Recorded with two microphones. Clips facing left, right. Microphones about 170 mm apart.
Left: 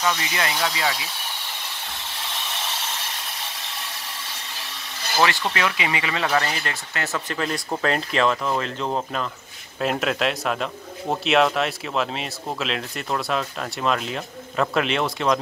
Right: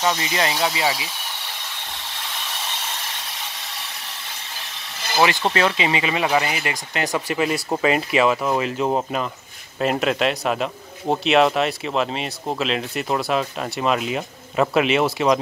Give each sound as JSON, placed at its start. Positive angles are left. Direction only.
{"t": 0.0, "sound": "speech", "side_deg": -35}
{"t": 5.1, "sound": "speech", "side_deg": -20}
{"t": 5.4, "sound": "speech", "side_deg": -30}
{"t": 9.8, "sound": "speech", "side_deg": 0}